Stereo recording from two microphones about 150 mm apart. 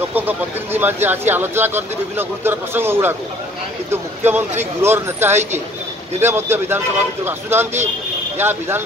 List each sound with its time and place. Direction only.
0.1 s speech: 15° right (ahead or behind)